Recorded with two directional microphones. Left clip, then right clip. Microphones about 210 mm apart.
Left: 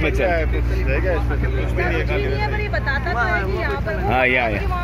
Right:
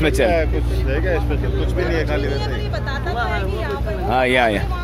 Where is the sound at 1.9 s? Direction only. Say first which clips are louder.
Right 1 dB; 40° right (ahead or behind).